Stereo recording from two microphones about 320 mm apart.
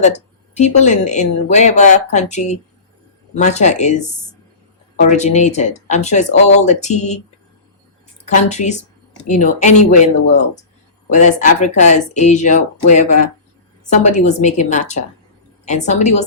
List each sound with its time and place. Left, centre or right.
0.0 s speech: left
8.2 s speech: left
11.1 s speech: left
13.9 s speech: left